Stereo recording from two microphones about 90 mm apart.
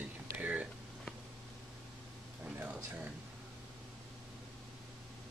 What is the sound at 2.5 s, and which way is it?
Speech, 15° right (ahead or behind).